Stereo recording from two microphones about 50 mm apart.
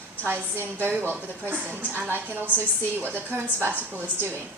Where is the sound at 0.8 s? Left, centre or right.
Right.